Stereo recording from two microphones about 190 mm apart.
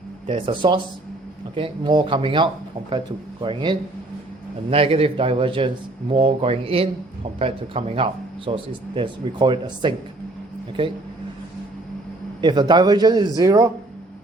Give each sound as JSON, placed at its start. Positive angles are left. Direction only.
{"t": 0.3, "sound": "speech", "side_deg": -25}
{"t": 12.4, "sound": "speech", "side_deg": -25}